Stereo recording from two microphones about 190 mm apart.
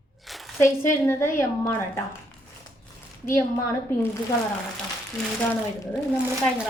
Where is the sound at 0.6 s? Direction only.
15° left (ahead or behind).